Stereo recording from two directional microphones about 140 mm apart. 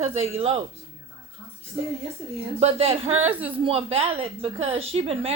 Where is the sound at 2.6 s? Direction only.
45° right (ahead or behind).